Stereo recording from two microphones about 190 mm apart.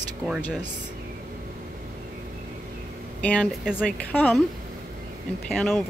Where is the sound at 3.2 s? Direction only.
5° left (ahead or behind).